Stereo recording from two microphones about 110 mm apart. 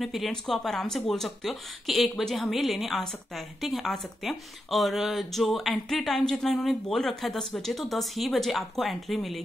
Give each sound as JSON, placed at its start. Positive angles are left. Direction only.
{"t": 0.0, "sound": "speech", "side_deg": 0}